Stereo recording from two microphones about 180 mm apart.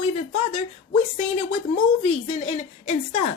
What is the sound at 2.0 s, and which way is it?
A woman's voice, 35° left (ahead or behind).